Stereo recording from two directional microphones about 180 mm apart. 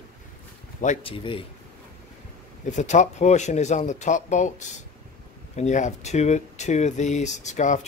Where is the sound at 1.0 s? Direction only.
30° left (ahead or behind).